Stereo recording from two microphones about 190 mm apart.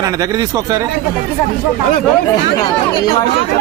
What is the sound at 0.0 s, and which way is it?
Speech, 20° right (ahead or behind).